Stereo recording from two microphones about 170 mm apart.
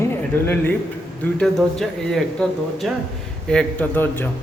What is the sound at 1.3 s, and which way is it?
Speech, centre (ahead or behind).